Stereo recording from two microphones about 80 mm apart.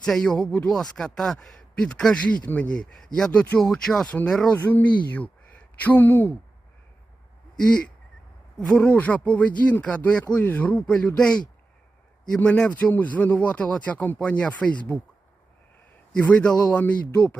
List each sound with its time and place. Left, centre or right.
0.0 s speech: centre
4.1 s speech: centre
7.5 s a sound: centre
8.5 s speech: centre
16.1 s speech: centre